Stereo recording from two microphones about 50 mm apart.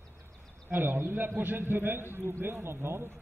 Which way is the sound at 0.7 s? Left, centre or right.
Right.